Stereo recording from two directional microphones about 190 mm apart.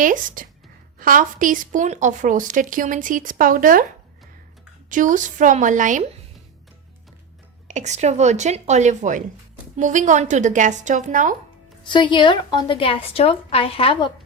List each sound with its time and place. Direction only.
0.0 s a woman's voice: 45° right (ahead or behind)
4.9 s a woman's voice: 45° right (ahead or behind)
7.7 s a woman's voice: 40° right (ahead or behind)
11.8 s a woman's voice: 25° left (ahead or behind)